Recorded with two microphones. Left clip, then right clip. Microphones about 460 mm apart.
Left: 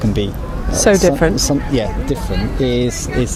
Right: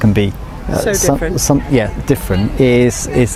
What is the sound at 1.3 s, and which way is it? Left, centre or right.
Speech, right.